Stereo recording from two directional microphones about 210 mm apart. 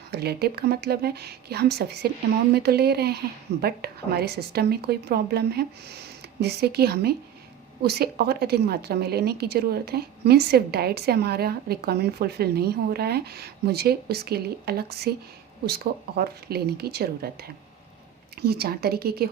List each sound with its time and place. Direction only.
0.1 s a woman's voice: 50° right (ahead or behind)
18.3 s a woman's voice: 50° right (ahead or behind)